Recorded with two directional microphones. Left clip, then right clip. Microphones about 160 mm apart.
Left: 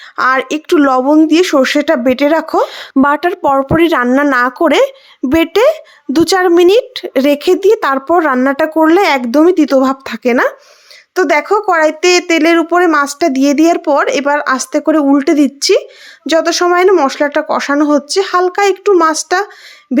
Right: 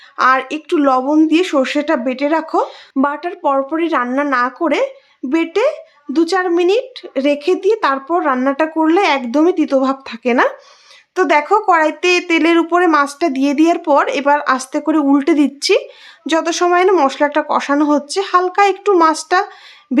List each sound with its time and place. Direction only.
0.2 s speech: 40° left (ahead or behind)
8.4 s speech: 40° left (ahead or behind); by 19.5 s 25° left (ahead or behind)
19.9 s speech: 15° left (ahead or behind)